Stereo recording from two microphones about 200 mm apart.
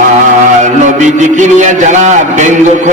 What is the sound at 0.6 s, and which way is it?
A man's voice, 40° right (ahead or behind).